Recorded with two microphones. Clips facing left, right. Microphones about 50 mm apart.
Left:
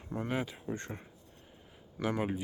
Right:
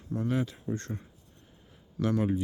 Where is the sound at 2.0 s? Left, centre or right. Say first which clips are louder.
Right 5 dB; centre.